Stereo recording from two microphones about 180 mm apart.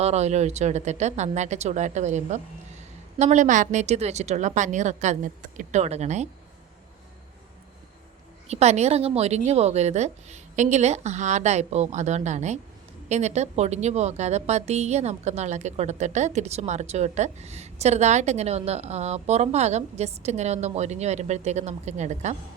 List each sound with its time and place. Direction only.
0.0 s a woman's voice: 35° right (ahead or behind)
8.4 s a woman's voice: 35° right (ahead or behind)